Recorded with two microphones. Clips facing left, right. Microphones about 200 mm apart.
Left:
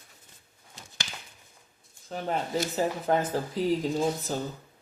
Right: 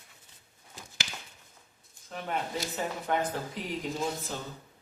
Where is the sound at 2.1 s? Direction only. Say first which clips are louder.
Left 4 dB; 35° left (ahead or behind).